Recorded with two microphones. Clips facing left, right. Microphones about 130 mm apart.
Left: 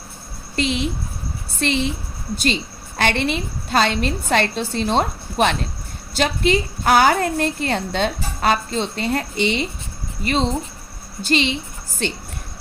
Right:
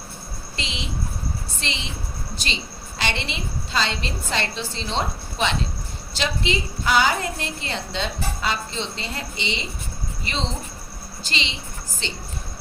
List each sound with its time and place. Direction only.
0.5 s a woman's voice: 55° left (ahead or behind)
11.3 s a woman's voice: 55° left (ahead or behind)